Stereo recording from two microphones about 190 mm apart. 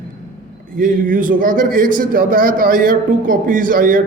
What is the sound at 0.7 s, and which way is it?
A man's voice, 45° right (ahead or behind).